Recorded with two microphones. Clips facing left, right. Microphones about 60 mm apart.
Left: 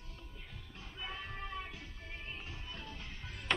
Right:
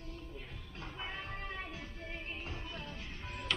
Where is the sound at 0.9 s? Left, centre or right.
Right.